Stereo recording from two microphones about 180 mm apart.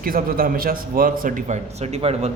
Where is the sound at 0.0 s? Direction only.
55° right (ahead or behind).